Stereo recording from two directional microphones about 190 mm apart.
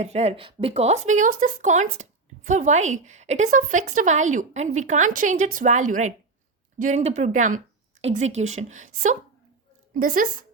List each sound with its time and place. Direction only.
0.0 s a woman's voice: 35° right (ahead or behind)